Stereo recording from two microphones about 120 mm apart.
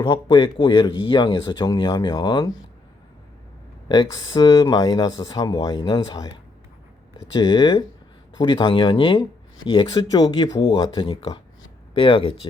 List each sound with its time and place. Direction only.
0.0 s speech: 40° left (ahead or behind)
3.8 s speech: 40° left (ahead or behind)
7.3 s speech: 30° left (ahead or behind)